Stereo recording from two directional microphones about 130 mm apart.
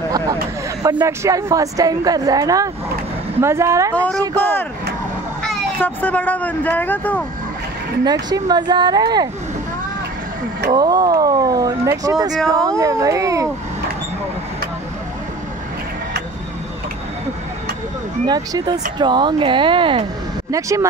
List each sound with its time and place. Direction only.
0.9 s speech: 20° right (ahead or behind)
3.9 s speech: 10° left (ahead or behind)
5.8 s speech: 15° left (ahead or behind)
8.0 s speech: 30° right (ahead or behind)
10.7 s speech: 30° right (ahead or behind)
18.2 s speech: 30° right (ahead or behind)
20.5 s speech: 25° right (ahead or behind)